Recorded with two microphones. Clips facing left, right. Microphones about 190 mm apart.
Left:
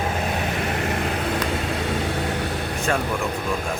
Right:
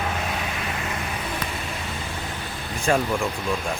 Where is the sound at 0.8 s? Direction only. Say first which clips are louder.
Left 6 dB; 65° left (ahead or behind).